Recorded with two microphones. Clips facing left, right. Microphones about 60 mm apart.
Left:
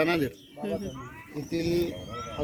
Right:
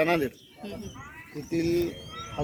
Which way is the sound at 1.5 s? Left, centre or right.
Centre.